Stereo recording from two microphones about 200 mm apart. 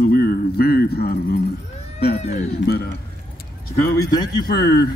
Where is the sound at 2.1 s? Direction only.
35° left (ahead or behind).